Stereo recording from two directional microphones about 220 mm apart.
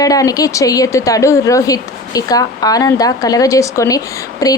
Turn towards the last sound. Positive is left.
turn(degrees=15)  # may be behind; listen again after turning